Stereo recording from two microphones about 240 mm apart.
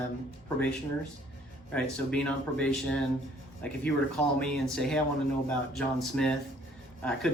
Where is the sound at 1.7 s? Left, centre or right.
Centre.